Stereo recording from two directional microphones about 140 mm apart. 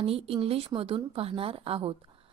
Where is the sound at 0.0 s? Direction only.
45° right (ahead or behind).